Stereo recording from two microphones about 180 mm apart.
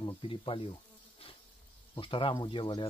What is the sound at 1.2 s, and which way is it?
Bee, 30° left (ahead or behind).